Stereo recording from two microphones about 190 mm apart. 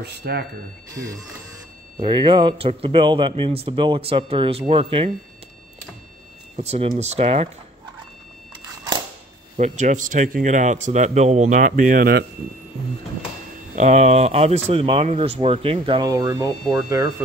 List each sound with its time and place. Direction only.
0.0 s speech: 55° right (ahead or behind)
0.9 s speech: 20° right (ahead or behind)
6.5 s speech: 35° right (ahead or behind)
8.6 s a sound: 20° right (ahead or behind)
9.6 s speech: 40° right (ahead or behind)
13.7 s speech: 40° right (ahead or behind); by 17.1 s 20° right (ahead or behind)